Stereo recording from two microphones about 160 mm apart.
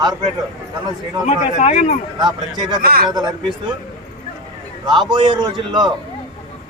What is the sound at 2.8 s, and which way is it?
Speech, 70° right (ahead or behind).